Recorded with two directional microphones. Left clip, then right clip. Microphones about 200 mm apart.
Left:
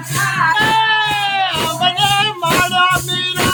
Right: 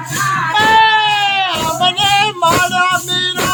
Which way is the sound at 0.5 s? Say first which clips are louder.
Right 8 dB; 15° right (ahead or behind).